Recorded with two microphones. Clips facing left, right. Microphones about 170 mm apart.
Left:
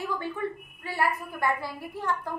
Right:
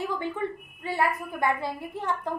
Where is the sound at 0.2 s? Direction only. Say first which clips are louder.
Right 2 dB; 20° right (ahead or behind).